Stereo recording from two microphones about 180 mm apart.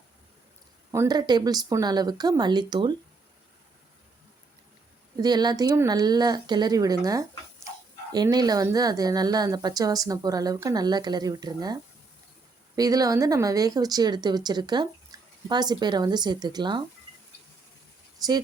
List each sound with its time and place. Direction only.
0.9 s a woman's voice: 20° right (ahead or behind)
5.1 s a woman's voice: 25° right (ahead or behind)
18.2 s a woman's voice: 20° right (ahead or behind)